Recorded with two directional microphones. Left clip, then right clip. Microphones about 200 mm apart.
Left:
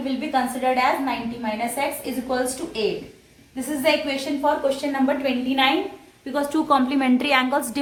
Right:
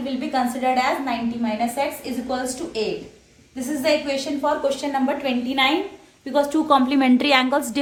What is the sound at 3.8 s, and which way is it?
Speech, 30° right (ahead or behind).